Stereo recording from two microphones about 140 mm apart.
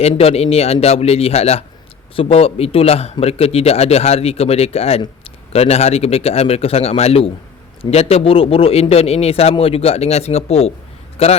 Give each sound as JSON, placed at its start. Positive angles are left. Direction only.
{"t": 0.1, "sound": "a man's voice", "side_deg": 45}